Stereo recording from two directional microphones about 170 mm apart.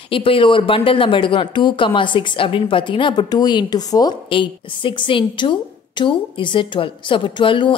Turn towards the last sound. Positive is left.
turn(degrees=30)  # may be behind; listen again after turning